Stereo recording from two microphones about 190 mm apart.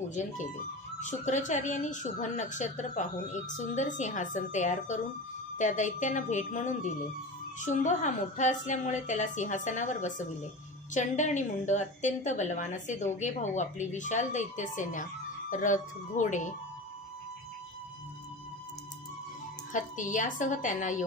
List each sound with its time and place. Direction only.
0.1 s a woman's voice: 40° left (ahead or behind)
19.7 s a woman's voice: 40° left (ahead or behind)